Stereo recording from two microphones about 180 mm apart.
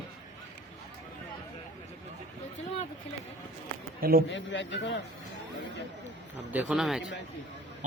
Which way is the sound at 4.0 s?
55° right (ahead or behind).